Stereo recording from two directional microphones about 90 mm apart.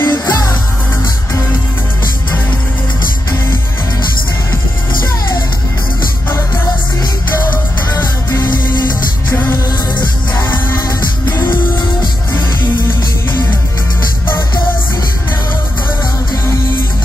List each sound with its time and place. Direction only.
0.0 s music: 45° left (ahead or behind)
8.0 s music: 30° left (ahead or behind)
11.5 s music: 55° left (ahead or behind)